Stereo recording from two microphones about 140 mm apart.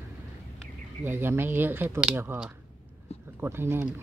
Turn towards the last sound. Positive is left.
turn(degrees=-15)  # may be behind; listen again after turning